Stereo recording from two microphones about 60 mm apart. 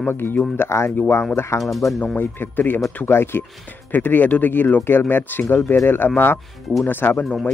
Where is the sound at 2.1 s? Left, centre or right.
Left.